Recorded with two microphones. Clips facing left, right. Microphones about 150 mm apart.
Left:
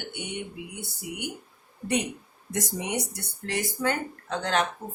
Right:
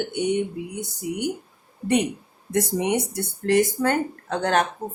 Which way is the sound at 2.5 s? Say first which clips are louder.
Right 8 dB; 60° right (ahead or behind).